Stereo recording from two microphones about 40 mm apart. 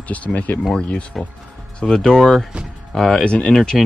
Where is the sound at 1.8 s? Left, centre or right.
Centre.